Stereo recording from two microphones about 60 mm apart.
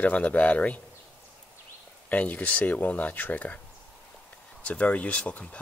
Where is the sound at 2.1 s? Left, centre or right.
Left.